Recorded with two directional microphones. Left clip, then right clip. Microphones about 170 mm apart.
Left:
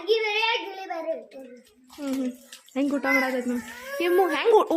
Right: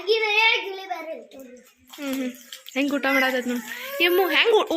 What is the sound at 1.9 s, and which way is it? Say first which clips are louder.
Speech: right 1 dB; 5° left (ahead or behind).